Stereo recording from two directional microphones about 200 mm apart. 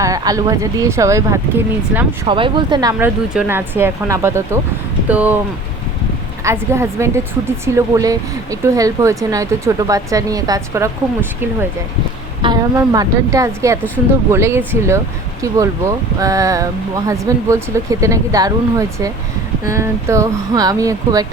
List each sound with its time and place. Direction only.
0.0 s speech: 15° right (ahead or behind)
2.2 s speech: 25° right (ahead or behind)
3.0 s speech: 10° right (ahead or behind)
6.4 s speech: 15° right (ahead or behind)
12.4 s speech: 20° right (ahead or behind)